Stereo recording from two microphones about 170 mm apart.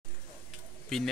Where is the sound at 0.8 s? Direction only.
Centre (ahead or behind).